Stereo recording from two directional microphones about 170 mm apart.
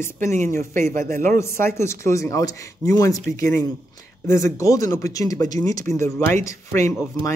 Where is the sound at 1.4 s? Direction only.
15° left (ahead or behind).